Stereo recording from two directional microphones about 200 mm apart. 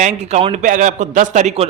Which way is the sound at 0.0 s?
35° right (ahead or behind).